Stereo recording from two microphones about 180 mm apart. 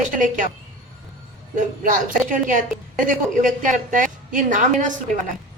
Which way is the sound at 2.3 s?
45° right (ahead or behind).